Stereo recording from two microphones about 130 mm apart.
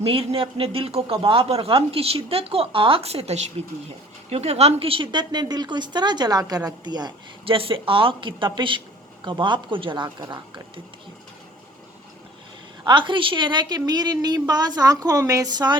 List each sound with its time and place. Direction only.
0.0 s a woman's voice: 45° right (ahead or behind)
12.8 s a woman's voice: 40° right (ahead or behind)